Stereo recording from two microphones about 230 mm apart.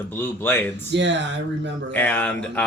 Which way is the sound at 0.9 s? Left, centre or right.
Right.